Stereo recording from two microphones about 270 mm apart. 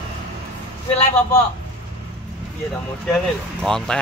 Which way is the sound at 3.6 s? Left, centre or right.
Centre.